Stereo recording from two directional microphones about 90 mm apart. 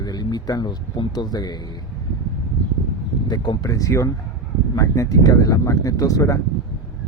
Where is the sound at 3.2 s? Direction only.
55° left (ahead or behind).